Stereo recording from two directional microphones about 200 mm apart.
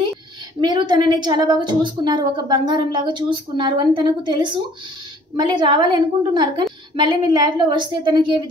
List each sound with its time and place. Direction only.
0.6 s a woman's voice: 20° right (ahead or behind)